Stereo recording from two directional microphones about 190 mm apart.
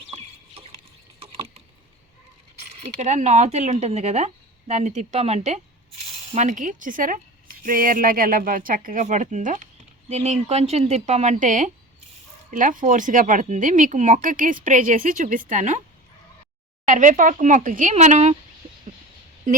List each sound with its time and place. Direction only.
0.1 s a sound: 30° right (ahead or behind)
3.0 s speech: 35° right (ahead or behind)
16.8 s speech: 40° right (ahead or behind)